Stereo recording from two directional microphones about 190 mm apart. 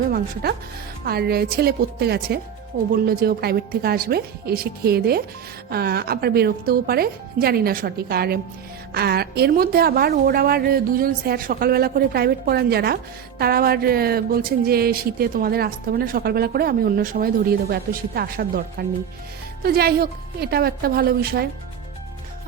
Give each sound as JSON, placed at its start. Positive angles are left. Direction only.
{"t": 1.0, "sound": "a woman's voice", "side_deg": -55}